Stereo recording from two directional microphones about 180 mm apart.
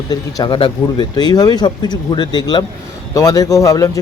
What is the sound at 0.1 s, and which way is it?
A man's voice, 25° left (ahead or behind).